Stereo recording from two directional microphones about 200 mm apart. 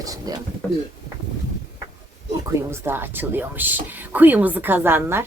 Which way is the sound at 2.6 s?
10° right (ahead or behind).